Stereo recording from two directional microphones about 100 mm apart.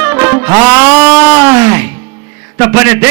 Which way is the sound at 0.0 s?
25° right (ahead or behind).